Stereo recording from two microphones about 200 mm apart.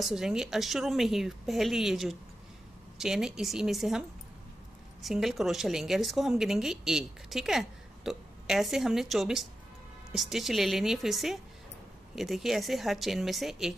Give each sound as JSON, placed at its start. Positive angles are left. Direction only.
{"t": 0.0, "sound": "a woman's voice", "side_deg": 0}
{"t": 5.0, "sound": "a woman's voice", "side_deg": 0}